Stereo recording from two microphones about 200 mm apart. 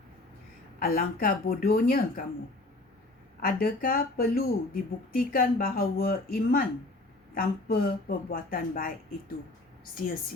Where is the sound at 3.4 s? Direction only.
45° left (ahead or behind).